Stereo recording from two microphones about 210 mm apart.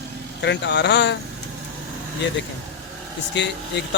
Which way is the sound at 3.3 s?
55° left (ahead or behind).